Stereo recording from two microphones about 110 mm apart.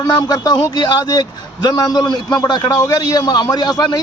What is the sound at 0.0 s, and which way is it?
A man's voice, 35° left (ahead or behind).